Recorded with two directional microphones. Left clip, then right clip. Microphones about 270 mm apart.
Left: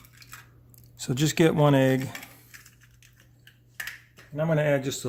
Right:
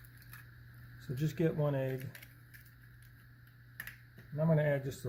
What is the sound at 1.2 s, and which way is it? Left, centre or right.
Speech, left.